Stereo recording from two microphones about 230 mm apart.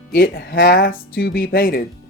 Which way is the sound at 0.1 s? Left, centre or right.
Left.